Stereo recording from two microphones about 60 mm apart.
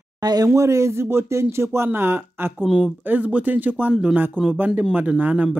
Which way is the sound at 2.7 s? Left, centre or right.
Centre.